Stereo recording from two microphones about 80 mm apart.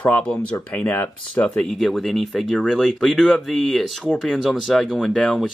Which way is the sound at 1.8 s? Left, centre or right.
Centre.